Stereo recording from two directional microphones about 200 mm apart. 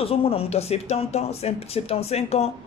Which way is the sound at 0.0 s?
30° left (ahead or behind).